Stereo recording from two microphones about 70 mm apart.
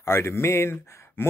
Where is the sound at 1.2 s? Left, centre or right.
Left.